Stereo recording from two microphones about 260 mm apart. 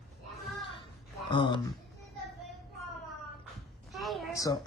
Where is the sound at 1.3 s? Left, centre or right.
Centre.